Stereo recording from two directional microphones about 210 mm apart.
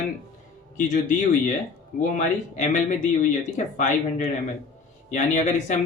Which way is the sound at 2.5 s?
35° left (ahead or behind).